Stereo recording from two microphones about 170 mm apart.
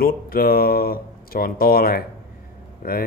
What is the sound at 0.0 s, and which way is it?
Speech, 60° left (ahead or behind).